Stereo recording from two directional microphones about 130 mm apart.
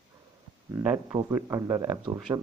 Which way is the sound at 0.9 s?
20° right (ahead or behind).